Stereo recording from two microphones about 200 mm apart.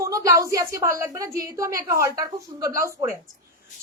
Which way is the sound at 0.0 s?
15° right (ahead or behind).